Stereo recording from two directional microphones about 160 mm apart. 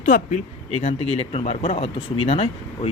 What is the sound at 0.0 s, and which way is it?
Speech, 50° left (ahead or behind).